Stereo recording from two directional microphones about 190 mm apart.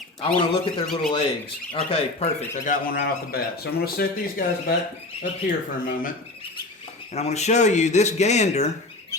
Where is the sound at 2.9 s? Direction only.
60° left (ahead or behind).